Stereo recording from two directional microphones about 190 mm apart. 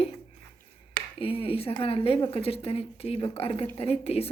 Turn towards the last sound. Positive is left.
turn(degrees=30)  # may be behind; listen again after turning